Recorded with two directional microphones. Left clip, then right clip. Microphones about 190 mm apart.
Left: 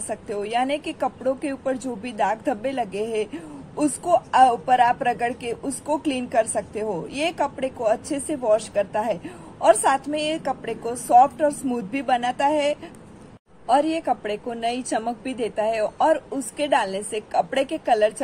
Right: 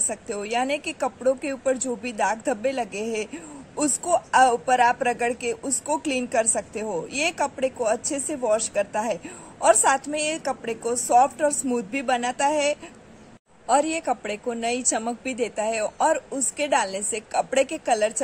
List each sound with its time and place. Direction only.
0.1 s a woman's voice: 5° right (ahead or behind)